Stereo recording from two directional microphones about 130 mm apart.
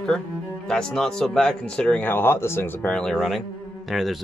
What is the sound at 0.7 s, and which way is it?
Speech, 5° left (ahead or behind).